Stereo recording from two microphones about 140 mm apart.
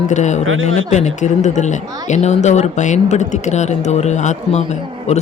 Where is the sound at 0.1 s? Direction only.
55° left (ahead or behind).